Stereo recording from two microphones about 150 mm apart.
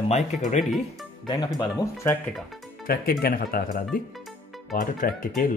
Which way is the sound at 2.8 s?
85° left.